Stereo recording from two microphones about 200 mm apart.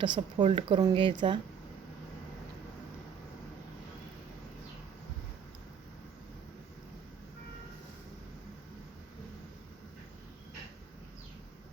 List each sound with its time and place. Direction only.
0.0 s a woman's voice: 25° right (ahead or behind)